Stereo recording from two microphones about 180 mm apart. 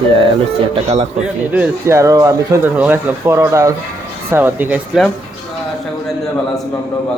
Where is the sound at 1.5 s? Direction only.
10° right (ahead or behind).